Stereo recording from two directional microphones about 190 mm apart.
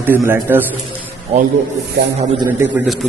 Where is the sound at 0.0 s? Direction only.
10° right (ahead or behind).